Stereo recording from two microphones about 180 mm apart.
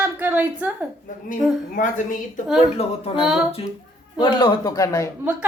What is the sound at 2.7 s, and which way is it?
A woman's voice, 30° left (ahead or behind).